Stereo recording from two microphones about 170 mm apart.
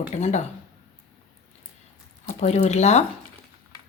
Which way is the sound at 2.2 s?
40° left (ahead or behind).